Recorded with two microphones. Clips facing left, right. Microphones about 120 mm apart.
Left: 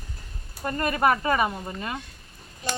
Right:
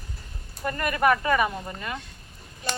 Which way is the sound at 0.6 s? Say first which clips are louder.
Even; 30° left (ahead or behind).